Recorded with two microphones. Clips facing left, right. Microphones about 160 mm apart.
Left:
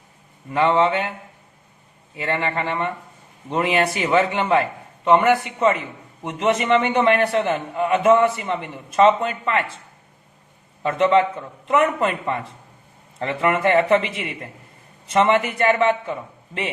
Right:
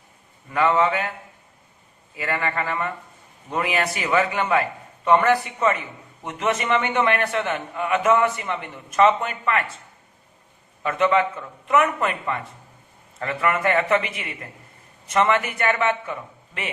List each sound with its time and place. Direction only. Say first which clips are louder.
0.5 s a man's voice: left 2 dB; 25° left (ahead or behind)
2.1 s a man's voice: left 2 dB; 25° left (ahead or behind)
10.8 s a man's voice: left 3 dB; 30° left (ahead or behind)